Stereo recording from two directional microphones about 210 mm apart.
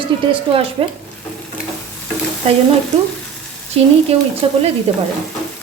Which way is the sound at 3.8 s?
30° right (ahead or behind).